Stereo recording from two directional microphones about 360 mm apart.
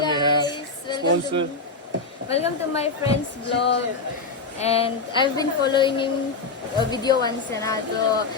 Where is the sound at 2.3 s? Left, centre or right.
Centre.